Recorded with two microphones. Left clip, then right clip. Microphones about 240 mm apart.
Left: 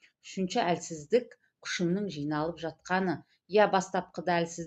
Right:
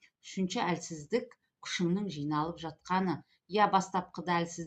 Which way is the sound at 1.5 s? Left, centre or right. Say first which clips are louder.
Left 2 dB; right.